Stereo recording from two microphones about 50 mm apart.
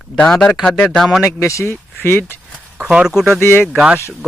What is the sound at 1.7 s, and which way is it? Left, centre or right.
Speech, left.